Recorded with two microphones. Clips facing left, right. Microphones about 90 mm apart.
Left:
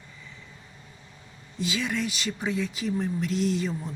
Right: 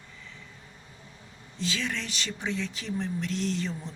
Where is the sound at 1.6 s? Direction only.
10° left (ahead or behind).